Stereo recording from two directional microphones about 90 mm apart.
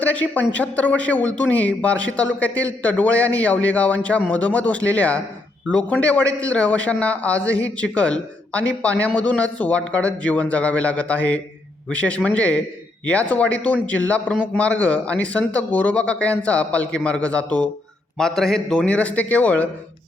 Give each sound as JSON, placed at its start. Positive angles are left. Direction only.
{"t": 0.0, "sound": "a man's voice", "side_deg": 20}
{"t": 18.2, "sound": "a man's voice", "side_deg": 5}